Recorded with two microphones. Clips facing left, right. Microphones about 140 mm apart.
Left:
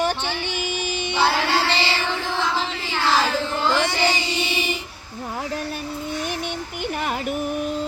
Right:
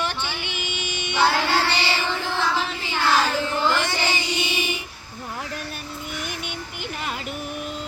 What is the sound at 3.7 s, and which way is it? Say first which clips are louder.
Chant: left 3 dB; 5° right (ahead or behind).